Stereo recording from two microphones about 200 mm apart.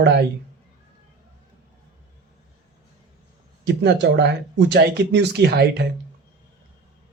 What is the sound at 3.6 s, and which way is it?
Speech, 55° right (ahead or behind).